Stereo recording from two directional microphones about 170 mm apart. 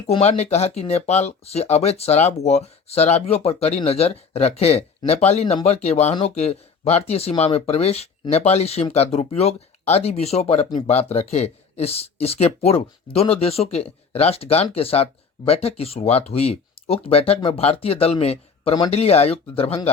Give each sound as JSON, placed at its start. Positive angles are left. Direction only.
{"t": 0.1, "sound": "speech", "side_deg": 40}